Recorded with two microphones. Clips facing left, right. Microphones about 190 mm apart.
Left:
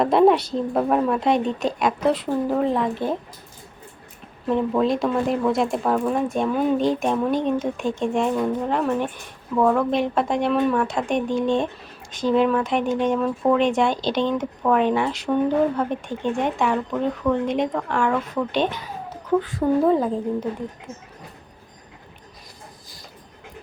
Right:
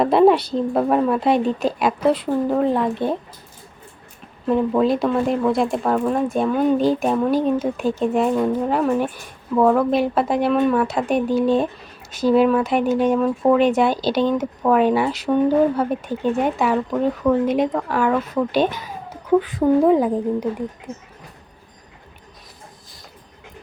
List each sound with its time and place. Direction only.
0.0 s speech: centre (ahead or behind)
4.4 s speech: centre (ahead or behind)